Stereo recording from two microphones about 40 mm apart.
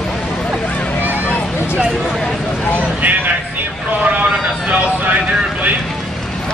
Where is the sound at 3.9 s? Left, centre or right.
Right.